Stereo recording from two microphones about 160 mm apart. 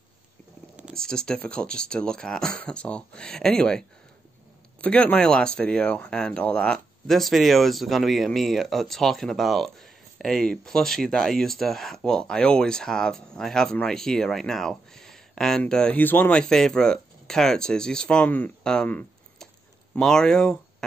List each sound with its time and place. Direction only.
0.9 s speech: 5° left (ahead or behind)
4.8 s speech: 5° left (ahead or behind)